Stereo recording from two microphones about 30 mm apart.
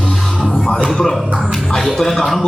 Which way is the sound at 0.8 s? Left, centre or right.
Centre.